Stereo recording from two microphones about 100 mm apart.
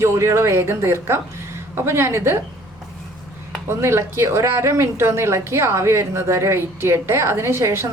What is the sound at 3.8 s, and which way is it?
A woman's voice, 25° right (ahead or behind).